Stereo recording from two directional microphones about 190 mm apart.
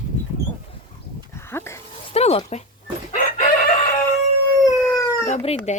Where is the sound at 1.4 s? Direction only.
10° left (ahead or behind).